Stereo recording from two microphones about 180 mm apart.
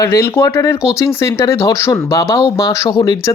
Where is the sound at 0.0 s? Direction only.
15° left (ahead or behind).